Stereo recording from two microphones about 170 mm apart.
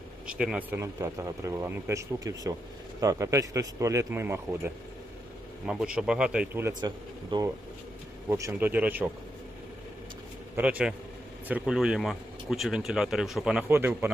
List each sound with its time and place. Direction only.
0.3 s speech: 5° right (ahead or behind)
0.8 s speech: 15° right (ahead or behind)
6.8 s speech: 25° right (ahead or behind)
10.6 s speech: 5° right (ahead or behind)